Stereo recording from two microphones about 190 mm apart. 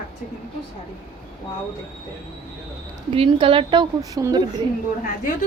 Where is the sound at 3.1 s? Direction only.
25° right (ahead or behind).